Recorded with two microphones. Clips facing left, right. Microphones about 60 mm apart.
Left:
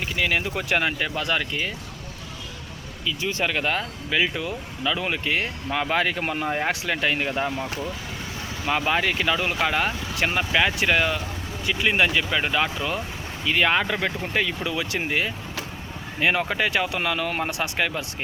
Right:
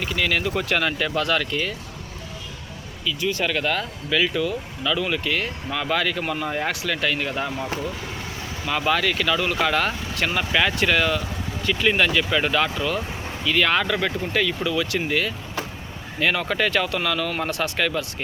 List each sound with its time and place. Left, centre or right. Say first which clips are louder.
0.0 s speech: right 1 dB; centre
3.1 s speech: right 2 dB; left
8.8 s speech: right 3 dB; left